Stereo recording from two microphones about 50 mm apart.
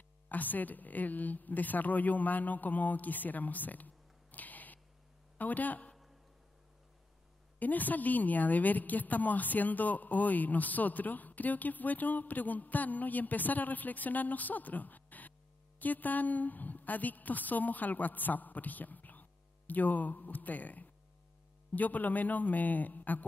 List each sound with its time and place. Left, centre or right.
0.3 s a woman's voice: left
7.5 s a woman's voice: left